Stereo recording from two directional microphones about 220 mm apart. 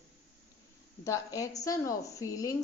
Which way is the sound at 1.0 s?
15° left (ahead or behind).